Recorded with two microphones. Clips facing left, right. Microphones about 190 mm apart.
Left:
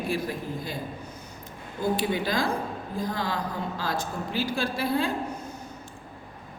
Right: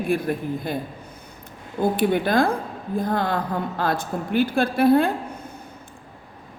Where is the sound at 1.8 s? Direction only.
55° right (ahead or behind).